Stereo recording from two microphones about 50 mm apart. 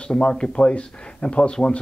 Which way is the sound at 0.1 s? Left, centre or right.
Centre.